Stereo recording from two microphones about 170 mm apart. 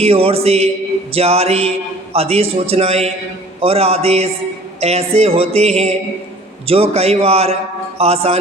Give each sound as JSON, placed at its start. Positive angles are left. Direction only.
{"t": 0.0, "sound": "speech", "side_deg": -35}